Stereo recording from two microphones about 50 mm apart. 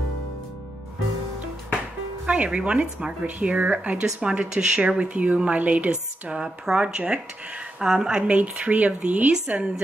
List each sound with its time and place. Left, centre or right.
2.2 s speech: right
8.4 s speech: right